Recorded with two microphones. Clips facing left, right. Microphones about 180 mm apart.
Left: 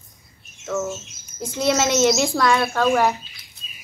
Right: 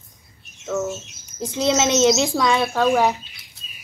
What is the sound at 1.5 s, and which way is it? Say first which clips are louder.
A woman's voice: right 1 dB; 20° right (ahead or behind).